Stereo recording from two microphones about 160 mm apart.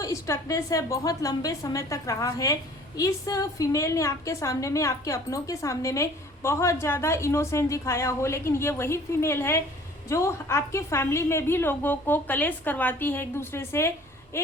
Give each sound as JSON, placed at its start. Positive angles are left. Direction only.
{"t": 0.0, "sound": "a woman's voice", "side_deg": 20}